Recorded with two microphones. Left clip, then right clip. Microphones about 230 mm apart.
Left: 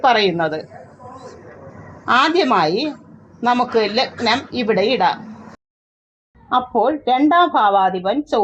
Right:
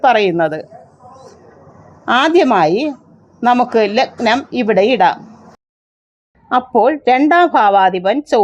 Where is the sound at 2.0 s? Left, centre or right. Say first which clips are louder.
Right 3 dB; right.